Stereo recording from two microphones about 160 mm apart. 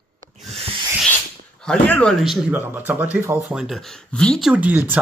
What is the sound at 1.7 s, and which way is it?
Speech, 5° left (ahead or behind).